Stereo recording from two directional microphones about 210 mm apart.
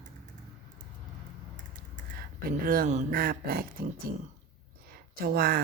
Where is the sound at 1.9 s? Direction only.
45° right (ahead or behind).